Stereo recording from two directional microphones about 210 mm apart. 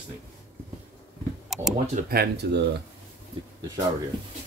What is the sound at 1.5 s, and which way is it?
Tick-tock, centre (ahead or behind).